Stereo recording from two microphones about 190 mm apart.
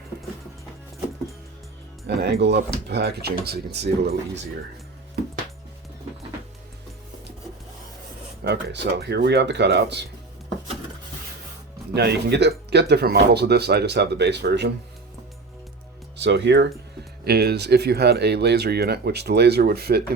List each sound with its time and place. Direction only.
2.0 s speech: 65° right (ahead or behind)
8.4 s speech: 60° right (ahead or behind)
11.9 s speech: 60° right (ahead or behind)
16.2 s speech: 70° right (ahead or behind)